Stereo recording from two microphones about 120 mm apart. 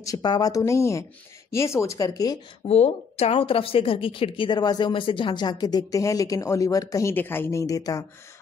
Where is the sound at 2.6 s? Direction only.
60° left (ahead or behind).